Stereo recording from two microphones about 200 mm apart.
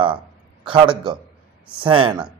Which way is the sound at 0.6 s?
25° right (ahead or behind).